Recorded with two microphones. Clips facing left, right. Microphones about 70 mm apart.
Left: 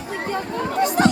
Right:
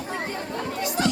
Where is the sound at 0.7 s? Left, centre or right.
Left.